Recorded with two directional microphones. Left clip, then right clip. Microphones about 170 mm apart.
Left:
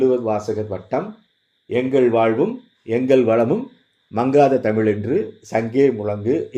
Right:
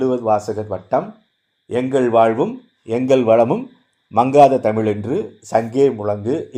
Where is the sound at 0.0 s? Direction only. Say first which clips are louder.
Right 1 dB; 35° right (ahead or behind).